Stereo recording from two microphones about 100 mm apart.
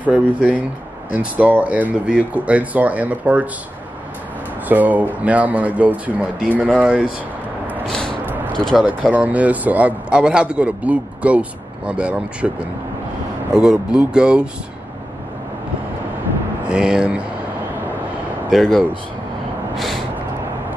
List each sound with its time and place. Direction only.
0.1 s a man's voice: 15° right (ahead or behind)
4.6 s a man's voice: 15° right (ahead or behind)
7.8 s a sound: 5° left (ahead or behind)
8.5 s speech: 5° left (ahead or behind)
8.8 s a man's voice: 15° right (ahead or behind)
16.6 s a man's voice: 10° right (ahead or behind)
18.5 s speech: centre (ahead or behind)